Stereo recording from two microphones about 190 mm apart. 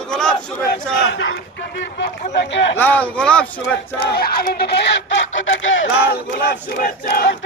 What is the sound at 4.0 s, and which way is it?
Speech, 55° left (ahead or behind).